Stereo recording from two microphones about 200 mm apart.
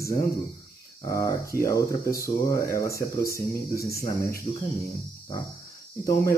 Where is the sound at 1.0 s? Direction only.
15° left (ahead or behind).